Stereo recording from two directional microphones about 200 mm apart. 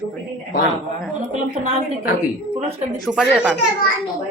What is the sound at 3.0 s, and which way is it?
Speech, 5° right (ahead or behind).